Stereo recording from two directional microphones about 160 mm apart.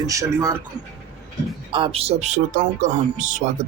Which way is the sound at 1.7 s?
35° right (ahead or behind).